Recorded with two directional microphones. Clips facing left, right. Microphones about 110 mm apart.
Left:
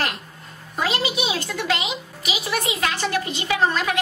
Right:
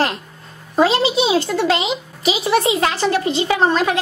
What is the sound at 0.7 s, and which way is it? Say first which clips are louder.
A child's voice: right 9 dB; 30° right (ahead or behind).